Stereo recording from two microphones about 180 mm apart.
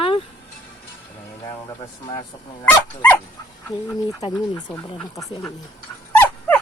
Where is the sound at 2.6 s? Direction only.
10° left (ahead or behind).